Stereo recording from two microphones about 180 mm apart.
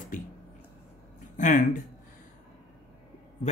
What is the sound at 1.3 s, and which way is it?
Speech, 45° left (ahead or behind).